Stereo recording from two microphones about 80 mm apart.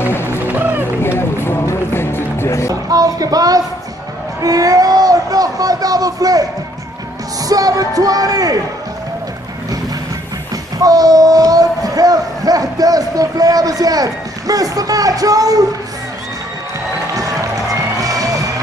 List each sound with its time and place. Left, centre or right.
0.0 s music: left
0.5 s music: right
1.0 s music: left
2.7 s a sound: right
7.4 s speech: right
10.8 s speech: right
17.1 s music: right